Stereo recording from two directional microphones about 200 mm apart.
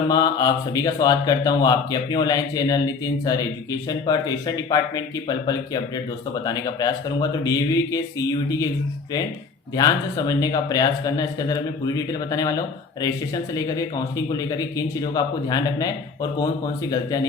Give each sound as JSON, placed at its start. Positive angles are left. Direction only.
{"t": 0.1, "sound": "speech", "side_deg": 20}
{"t": 9.7, "sound": "speech", "side_deg": 20}